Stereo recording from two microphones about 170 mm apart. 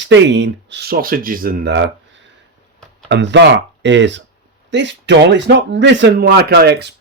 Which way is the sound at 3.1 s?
90° right.